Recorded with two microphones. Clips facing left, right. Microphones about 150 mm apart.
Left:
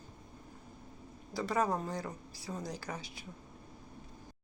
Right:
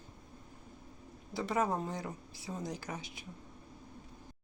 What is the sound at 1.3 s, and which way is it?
Speech, 25° right (ahead or behind).